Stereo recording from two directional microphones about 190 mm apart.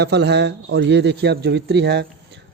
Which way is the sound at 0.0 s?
65° right (ahead or behind).